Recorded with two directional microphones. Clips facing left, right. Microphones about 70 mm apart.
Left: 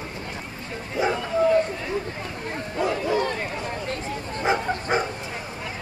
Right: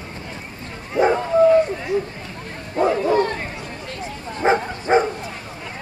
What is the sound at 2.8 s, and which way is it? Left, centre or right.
Bow-wow, right.